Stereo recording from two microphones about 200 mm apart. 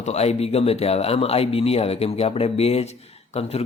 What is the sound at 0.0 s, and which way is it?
Speech, 35° left (ahead or behind).